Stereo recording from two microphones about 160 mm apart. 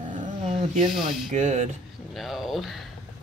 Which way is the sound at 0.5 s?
50° right (ahead or behind).